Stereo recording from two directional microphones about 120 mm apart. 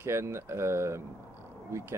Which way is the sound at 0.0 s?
20° right (ahead or behind).